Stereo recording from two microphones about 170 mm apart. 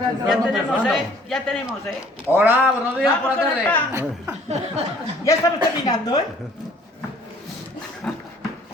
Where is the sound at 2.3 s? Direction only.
10° right (ahead or behind).